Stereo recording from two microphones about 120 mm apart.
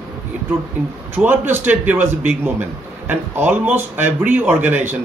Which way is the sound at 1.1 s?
15° right (ahead or behind).